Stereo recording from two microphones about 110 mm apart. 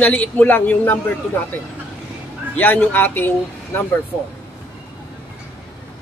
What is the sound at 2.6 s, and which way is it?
Speech, 15° left (ahead or behind).